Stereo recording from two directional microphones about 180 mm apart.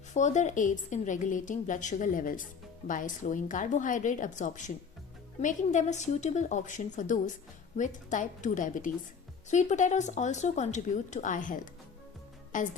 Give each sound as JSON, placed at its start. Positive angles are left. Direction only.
{"t": 0.1, "sound": "a woman's voice", "side_deg": 40}